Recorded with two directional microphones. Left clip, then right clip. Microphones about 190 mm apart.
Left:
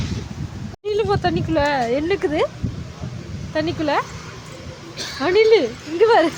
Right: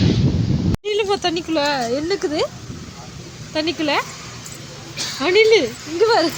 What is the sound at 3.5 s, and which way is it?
Speech, centre (ahead or behind).